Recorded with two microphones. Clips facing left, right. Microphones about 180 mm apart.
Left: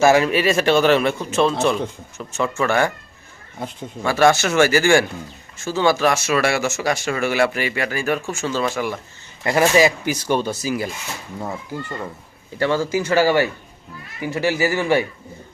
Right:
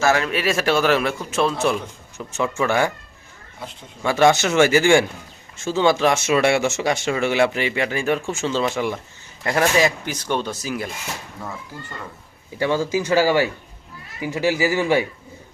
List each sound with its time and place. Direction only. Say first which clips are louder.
0.0 s a man's voice: left 5 dB; 10° left (ahead or behind); by 2.9 s 15° right (ahead or behind)
4.0 s speech: even; 20° right (ahead or behind)
9.4 s a man's voice: left 3 dB; 5° left (ahead or behind)
12.5 s speech: left 1 dB; 15° right (ahead or behind)